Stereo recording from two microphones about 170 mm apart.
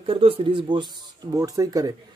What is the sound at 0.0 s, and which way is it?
Speech, 35° right (ahead or behind).